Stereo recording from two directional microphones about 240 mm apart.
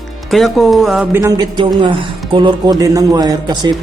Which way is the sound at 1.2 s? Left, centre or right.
Centre.